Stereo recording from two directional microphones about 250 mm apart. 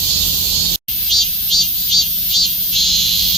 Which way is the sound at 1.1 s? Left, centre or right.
Centre.